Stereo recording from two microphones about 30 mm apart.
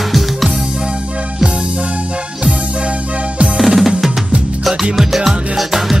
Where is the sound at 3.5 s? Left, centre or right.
Centre.